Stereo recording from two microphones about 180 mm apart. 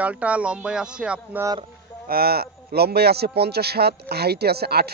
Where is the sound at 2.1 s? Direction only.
60° right (ahead or behind).